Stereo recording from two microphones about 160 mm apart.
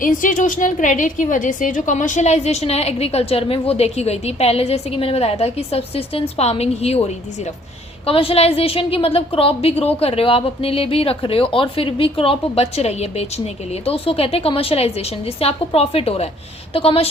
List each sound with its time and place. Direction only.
0.0 s a woman's voice: 55° left (ahead or behind); by 7.0 s 40° left (ahead or behind)
8.0 s a woman's voice: 35° left (ahead or behind)